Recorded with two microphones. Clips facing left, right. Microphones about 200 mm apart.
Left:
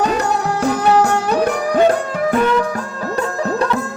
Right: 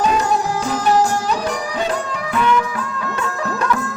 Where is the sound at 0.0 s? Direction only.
65° left (ahead or behind).